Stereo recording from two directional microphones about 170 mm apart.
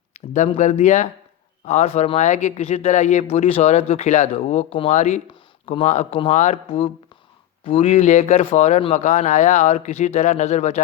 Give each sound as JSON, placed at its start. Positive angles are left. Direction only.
{"t": 0.1, "sound": "speech", "side_deg": 45}